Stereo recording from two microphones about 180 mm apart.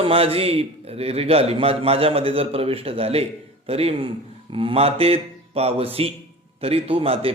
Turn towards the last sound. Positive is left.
turn(degrees=-30)  # may be behind; listen again after turning